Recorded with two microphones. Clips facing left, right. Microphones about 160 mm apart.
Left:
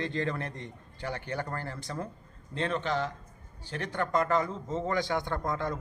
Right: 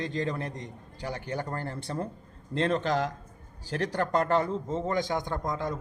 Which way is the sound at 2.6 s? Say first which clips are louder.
Right 4 dB; 40° right (ahead or behind).